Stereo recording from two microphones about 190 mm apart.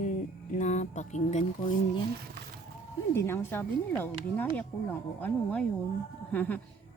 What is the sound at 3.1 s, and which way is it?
Speech, 15° left (ahead or behind).